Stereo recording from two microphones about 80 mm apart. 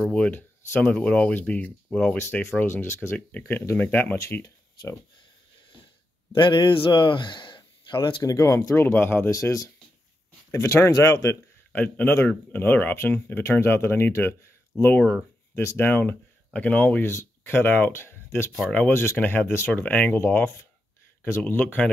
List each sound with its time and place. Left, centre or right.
0.0 s speech: centre
2.6 s speech: left
4.2 s speech: left
6.3 s speech: left
8.2 s speech: left
9.3 s speech: left
10.5 s speech: left
11.7 s speech: left
17.0 s speech: left
18.7 s speech: centre